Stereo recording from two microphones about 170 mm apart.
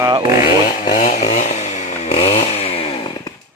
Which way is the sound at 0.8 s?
50° left (ahead or behind).